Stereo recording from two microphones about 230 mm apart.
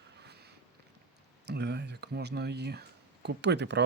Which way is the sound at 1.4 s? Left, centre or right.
Right.